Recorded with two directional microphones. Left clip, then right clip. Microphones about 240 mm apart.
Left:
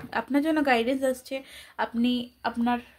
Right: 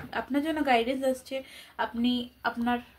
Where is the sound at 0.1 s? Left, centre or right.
Left.